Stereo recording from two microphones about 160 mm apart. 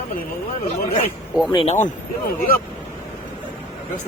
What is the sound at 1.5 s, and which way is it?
Speech, 45° left (ahead or behind).